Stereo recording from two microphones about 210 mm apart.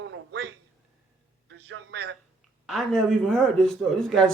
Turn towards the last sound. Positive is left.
turn(degrees=0)  # may be behind; listen again after turning